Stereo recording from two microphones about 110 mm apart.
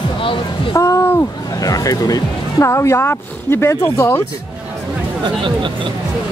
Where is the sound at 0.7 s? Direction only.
30° left (ahead or behind).